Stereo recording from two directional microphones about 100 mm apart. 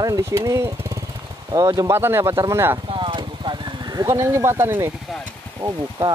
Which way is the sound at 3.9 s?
35° right (ahead or behind).